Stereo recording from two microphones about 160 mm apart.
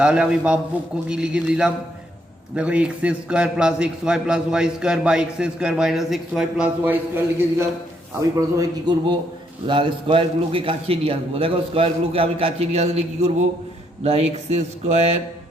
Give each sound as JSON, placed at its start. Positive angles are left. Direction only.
{"t": 0.0, "sound": "a man's voice", "side_deg": -5}
{"t": 9.6, "sound": "a man's voice", "side_deg": -30}